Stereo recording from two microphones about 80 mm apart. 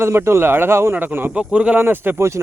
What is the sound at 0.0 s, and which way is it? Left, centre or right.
A man's voice, right.